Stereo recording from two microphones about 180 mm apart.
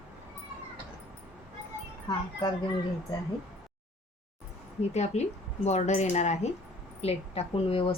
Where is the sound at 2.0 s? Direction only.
20° left (ahead or behind).